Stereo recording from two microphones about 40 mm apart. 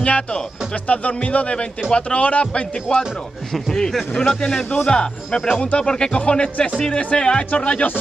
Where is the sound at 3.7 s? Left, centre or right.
Centre.